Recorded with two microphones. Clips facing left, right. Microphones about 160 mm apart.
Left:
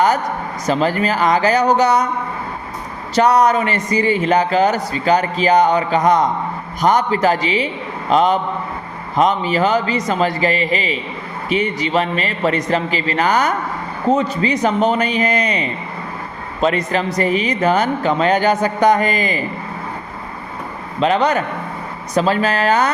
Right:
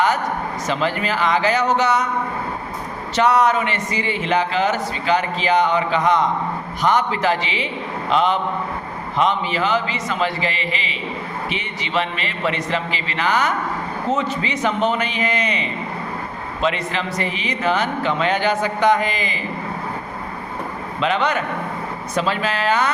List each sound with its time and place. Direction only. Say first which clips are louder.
0.7 s a man's voice: left 6 dB; 40° left (ahead or behind)
3.2 s a man's voice: left 3 dB; 40° left (ahead or behind)
21.0 s a man's voice: left 5 dB; 40° left (ahead or behind)